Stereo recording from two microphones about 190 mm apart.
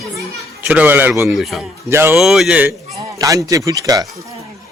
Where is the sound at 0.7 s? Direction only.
10° right (ahead or behind).